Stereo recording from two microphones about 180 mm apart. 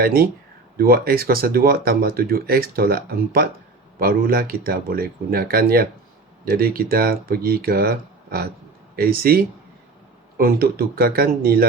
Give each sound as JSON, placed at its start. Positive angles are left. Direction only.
{"t": 0.0, "sound": "speech", "side_deg": -55}